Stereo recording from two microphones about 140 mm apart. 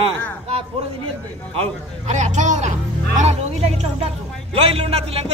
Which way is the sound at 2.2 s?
60° right (ahead or behind).